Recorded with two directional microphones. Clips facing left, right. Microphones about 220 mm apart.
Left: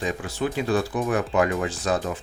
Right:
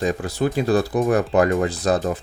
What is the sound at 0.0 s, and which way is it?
Speech, 40° right (ahead or behind).